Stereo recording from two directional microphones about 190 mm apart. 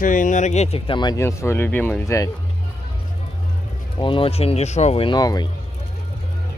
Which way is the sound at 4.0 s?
25° left (ahead or behind).